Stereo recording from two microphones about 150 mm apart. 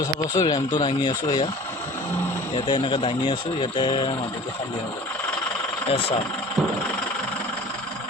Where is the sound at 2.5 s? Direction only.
35° left (ahead or behind).